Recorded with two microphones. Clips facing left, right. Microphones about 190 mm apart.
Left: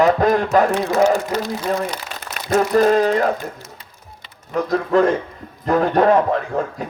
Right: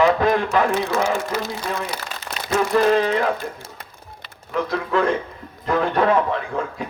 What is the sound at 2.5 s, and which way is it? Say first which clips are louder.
Speech: left 3 dB; 45° left (ahead or behind).